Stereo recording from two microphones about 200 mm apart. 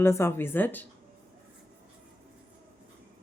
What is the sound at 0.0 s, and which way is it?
Speech, 10° left (ahead or behind).